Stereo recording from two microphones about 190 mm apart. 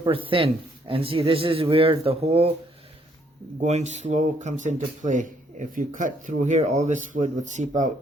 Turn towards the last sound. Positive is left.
turn(degrees=-40)  # may be behind; listen again after turning